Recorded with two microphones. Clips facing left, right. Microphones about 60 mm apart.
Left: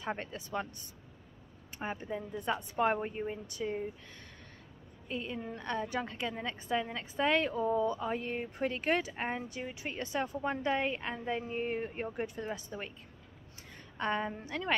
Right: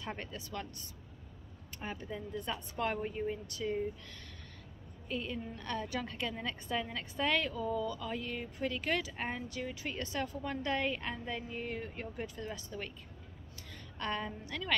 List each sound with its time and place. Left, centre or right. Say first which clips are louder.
0.0 s a woman's voice: left 4 dB; left
1.8 s a woman's voice: left 4 dB; left
5.0 s a woman's voice: left 1 dB; left
11.2 s a woman's voice: left 5 dB; left
13.9 s a woman's voice: left 4 dB; left